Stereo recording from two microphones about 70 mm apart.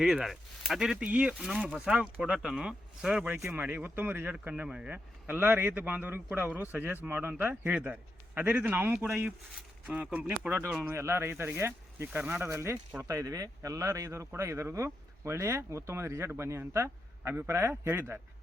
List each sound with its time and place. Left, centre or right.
0.0 s speech: centre
3.3 s speech: right
3.6 s a man's voice: right
5.2 s a man's voice: right
9.8 s a man's voice: centre
10.9 s speech: right